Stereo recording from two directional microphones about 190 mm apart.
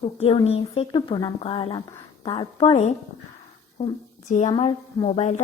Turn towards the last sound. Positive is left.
turn(degrees=35)  # may be behind; listen again after turning